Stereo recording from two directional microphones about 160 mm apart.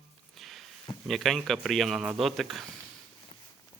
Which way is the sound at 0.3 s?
Centre (ahead or behind).